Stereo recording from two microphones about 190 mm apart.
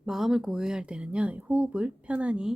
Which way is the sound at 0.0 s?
Centre (ahead or behind).